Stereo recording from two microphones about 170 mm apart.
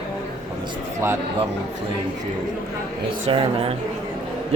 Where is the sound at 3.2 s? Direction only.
35° right (ahead or behind).